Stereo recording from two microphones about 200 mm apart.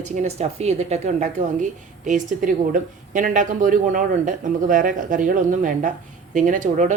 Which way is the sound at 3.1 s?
40° right (ahead or behind).